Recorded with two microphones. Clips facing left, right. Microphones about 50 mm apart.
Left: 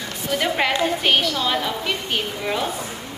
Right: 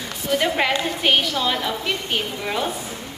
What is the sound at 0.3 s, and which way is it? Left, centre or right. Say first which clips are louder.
A woman's voice: right 1 dB; centre.